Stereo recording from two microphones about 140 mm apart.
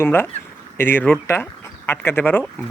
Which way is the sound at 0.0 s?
15° left (ahead or behind).